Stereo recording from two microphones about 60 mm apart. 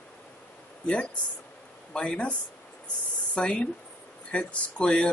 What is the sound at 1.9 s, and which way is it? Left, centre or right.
Speech, centre.